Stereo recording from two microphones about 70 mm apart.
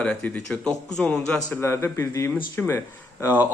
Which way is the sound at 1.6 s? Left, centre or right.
Left.